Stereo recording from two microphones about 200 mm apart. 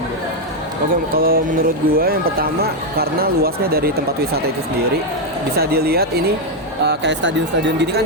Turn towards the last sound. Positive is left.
turn(degrees=-65)  # may be behind; listen again after turning